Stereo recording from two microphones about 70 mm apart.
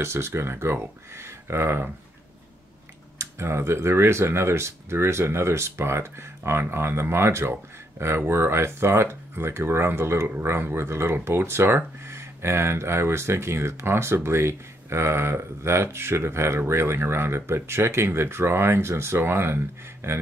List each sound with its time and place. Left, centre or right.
0.0 s speech: right
3.2 s speech: right